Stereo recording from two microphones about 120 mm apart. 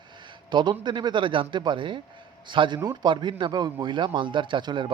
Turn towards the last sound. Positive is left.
turn(degrees=-40)  # may be behind; listen again after turning